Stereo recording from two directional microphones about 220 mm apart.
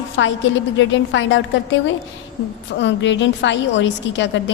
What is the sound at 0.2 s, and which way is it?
A woman's voice, 55° left (ahead or behind).